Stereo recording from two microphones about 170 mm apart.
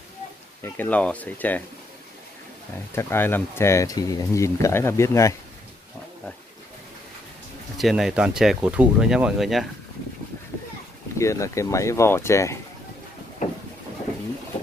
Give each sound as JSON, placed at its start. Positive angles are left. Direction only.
{"t": 0.6, "sound": "speech", "side_deg": 10}
{"t": 2.9, "sound": "speech", "side_deg": 15}
{"t": 7.7, "sound": "speech", "side_deg": 0}
{"t": 11.1, "sound": "speech", "side_deg": 15}